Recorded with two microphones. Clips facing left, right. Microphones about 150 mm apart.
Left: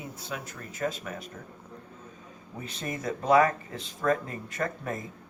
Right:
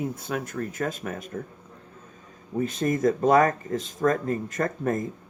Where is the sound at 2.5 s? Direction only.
45° right (ahead or behind).